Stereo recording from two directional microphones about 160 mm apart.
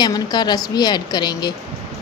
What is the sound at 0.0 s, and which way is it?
A woman's voice, 25° left (ahead or behind).